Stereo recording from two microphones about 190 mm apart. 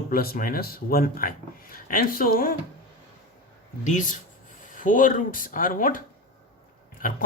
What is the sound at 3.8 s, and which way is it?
Speech, 40° left (ahead or behind).